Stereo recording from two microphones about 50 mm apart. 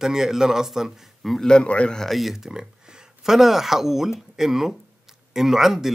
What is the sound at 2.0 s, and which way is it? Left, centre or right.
Speech, centre.